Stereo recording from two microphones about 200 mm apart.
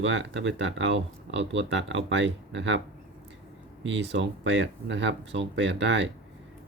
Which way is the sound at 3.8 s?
65° right (ahead or behind).